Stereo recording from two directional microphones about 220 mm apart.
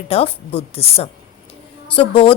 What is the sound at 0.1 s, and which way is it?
A woman's voice, 25° left (ahead or behind).